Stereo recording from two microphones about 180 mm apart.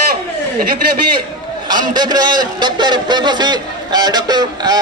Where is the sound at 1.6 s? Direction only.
25° right (ahead or behind).